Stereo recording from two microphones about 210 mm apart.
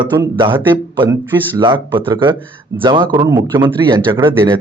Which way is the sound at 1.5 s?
20° right (ahead or behind).